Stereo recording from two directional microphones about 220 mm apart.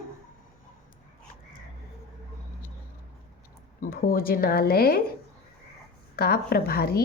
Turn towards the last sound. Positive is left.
turn(degrees=45)  # may be behind; listen again after turning